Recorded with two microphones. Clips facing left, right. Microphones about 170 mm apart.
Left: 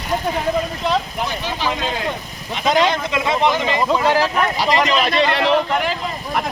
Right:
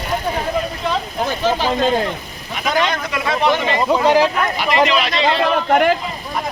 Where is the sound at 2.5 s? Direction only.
20° left (ahead or behind).